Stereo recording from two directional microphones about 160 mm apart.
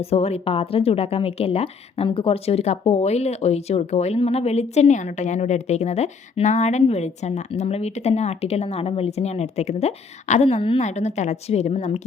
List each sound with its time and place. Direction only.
0.0 s speech: 40° left (ahead or behind)